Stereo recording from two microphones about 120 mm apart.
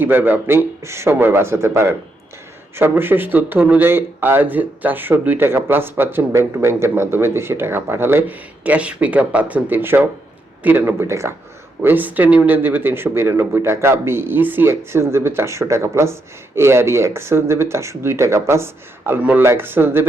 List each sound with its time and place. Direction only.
0.0 s speech: 15° right (ahead or behind)